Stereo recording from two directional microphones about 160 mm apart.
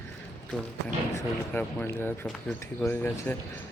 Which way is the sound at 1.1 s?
10° left (ahead or behind).